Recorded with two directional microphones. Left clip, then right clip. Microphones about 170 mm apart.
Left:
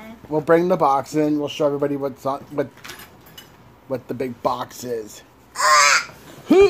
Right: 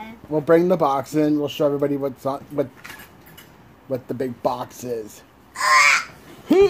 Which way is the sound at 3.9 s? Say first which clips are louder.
Even; 5° right (ahead or behind).